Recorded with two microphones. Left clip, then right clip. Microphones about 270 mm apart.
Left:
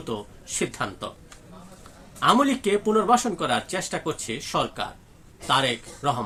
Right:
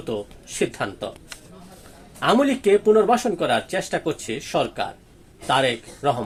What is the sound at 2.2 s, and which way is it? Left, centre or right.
A man's voice, centre.